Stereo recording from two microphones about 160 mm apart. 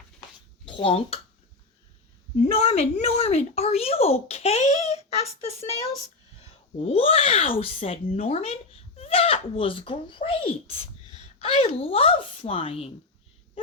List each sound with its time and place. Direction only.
0.6 s speech: 30° left (ahead or behind)
2.4 s speech: 40° left (ahead or behind)